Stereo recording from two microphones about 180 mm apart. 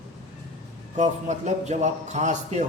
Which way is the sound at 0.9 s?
40° right (ahead or behind).